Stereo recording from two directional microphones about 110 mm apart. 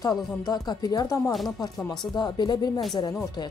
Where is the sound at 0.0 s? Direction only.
35° left (ahead or behind).